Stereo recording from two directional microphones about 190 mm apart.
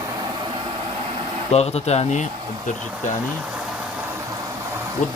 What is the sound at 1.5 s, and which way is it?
Speech, 35° left (ahead or behind).